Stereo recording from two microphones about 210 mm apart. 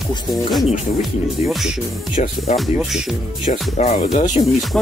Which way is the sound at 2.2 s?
35° left (ahead or behind).